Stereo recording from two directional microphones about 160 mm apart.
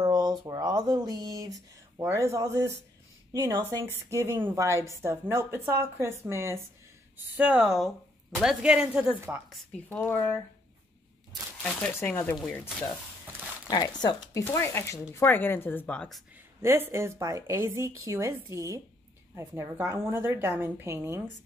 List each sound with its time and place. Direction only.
0.0 s a woman's voice: 20° right (ahead or behind)
7.3 s speech: 5° right (ahead or behind)
9.8 s speech: 15° left (ahead or behind)
11.9 s speech: 15° left (ahead or behind)
13.7 s speech: 25° left (ahead or behind); by 16.2 s 5° left (ahead or behind)
16.6 s a woman's voice: 15° right (ahead or behind)